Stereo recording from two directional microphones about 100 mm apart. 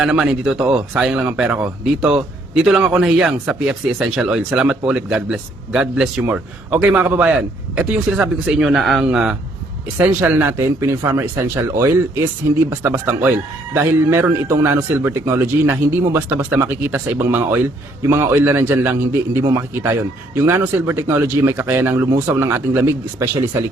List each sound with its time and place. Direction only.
0.0 s speech: 10° right (ahead or behind)
10.2 s speech: 25° right (ahead or behind)